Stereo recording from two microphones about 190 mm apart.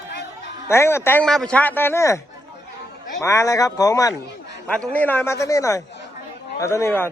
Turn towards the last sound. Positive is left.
turn(degrees=15)  # may be behind; listen again after turning